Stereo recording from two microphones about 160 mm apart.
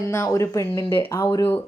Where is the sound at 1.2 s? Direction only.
30° left (ahead or behind).